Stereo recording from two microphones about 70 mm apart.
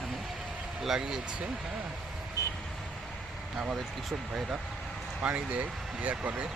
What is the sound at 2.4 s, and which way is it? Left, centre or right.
Vehicle, left.